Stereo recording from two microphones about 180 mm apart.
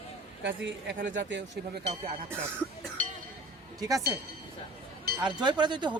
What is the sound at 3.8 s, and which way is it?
Speech, 20° right (ahead or behind).